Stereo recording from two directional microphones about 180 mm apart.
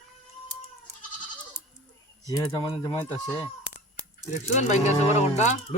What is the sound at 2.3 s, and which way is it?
Speech, 20° left (ahead or behind).